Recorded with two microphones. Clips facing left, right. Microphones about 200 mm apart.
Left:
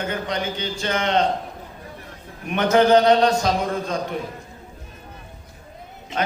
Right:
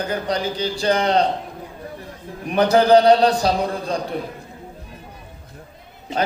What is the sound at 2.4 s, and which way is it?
A man's voice, 35° right (ahead or behind).